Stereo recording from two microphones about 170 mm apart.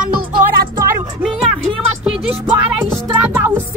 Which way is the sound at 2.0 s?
5° right (ahead or behind).